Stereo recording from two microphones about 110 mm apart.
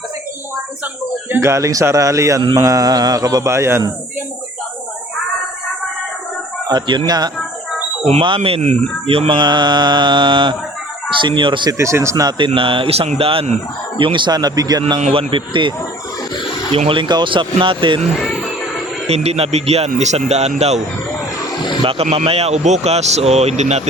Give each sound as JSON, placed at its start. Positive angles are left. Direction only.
{"t": 1.3, "sound": "speech", "side_deg": -25}
{"t": 6.7, "sound": "speech", "side_deg": -40}
{"t": 8.4, "sound": "speech", "side_deg": -75}
{"t": 9.2, "sound": "mantra", "side_deg": -45}
{"t": 11.8, "sound": "speech", "side_deg": -25}
{"t": 12.5, "sound": "speech", "side_deg": -55}
{"t": 14.0, "sound": "speech", "side_deg": -45}
{"t": 15.0, "sound": "mantra", "side_deg": -60}
{"t": 16.7, "sound": "mantra", "side_deg": -55}
{"t": 19.0, "sound": "a man's voice", "side_deg": -70}
{"t": 21.8, "sound": "a man's voice", "side_deg": -65}